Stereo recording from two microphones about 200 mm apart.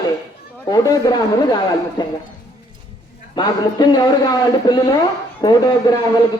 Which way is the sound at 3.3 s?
20° left (ahead or behind).